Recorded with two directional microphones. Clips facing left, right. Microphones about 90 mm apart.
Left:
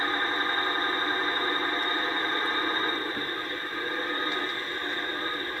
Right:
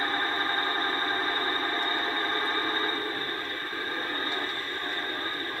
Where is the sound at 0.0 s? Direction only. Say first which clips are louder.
Left 1 dB; 20° left (ahead or behind).